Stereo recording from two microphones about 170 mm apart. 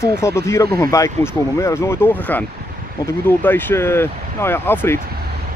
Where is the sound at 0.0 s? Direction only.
15° left (ahead or behind).